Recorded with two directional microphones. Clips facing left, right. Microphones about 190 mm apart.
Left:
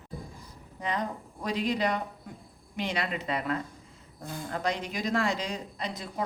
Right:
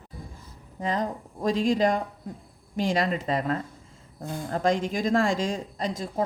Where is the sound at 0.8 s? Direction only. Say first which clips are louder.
Right 4 dB; 40° right (ahead or behind).